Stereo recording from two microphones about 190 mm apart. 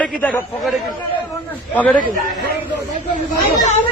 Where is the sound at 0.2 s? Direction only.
10° left (ahead or behind).